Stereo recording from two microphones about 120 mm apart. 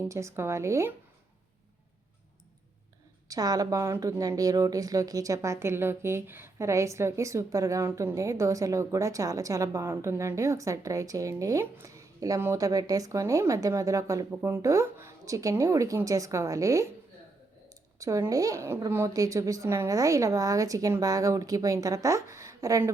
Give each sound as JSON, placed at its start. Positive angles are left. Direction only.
{"t": 0.0, "sound": "speech", "side_deg": -25}
{"t": 3.2, "sound": "speech", "side_deg": -30}
{"t": 18.0, "sound": "speech", "side_deg": -25}